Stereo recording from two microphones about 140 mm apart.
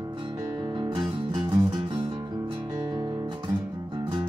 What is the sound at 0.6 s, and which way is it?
Music, 35° right (ahead or behind).